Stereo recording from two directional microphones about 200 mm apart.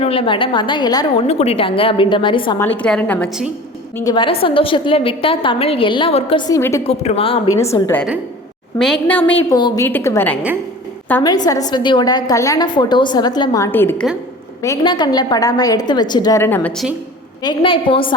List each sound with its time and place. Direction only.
0.0 s a woman's voice: 25° left (ahead or behind)
1.3 s a woman's voice: 30° left (ahead or behind)
2.6 s a woman's voice: 10° left (ahead or behind)
3.9 s a woman's voice: 20° left (ahead or behind)
6.5 s a woman's voice: 15° left (ahead or behind)
6.8 s speech: 30° left (ahead or behind)
7.6 s a woman's voice: 15° left (ahead or behind)
9.6 s a woman's voice: 20° left (ahead or behind); by 16.9 s 5° left (ahead or behind)
17.4 s a woman's voice: 25° left (ahead or behind)